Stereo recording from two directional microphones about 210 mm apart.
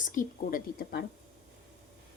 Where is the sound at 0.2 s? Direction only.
40° left (ahead or behind).